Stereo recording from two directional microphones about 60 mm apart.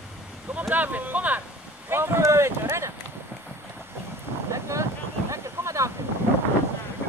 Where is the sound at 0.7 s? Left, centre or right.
Right.